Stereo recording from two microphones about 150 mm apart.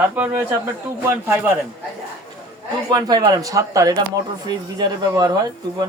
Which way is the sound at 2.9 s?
25° right (ahead or behind).